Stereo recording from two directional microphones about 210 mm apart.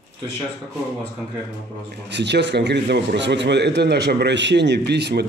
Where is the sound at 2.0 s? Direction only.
55° right (ahead or behind).